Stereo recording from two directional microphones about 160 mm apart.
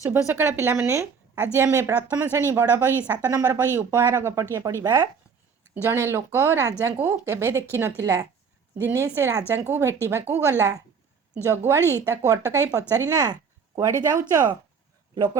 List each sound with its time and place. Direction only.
0.0 s speech: 15° right (ahead or behind)